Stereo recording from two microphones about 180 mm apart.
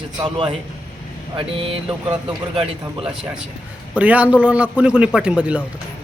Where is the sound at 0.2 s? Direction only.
30° right (ahead or behind).